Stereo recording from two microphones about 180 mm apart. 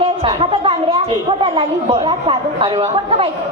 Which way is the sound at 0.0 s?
30° right (ahead or behind).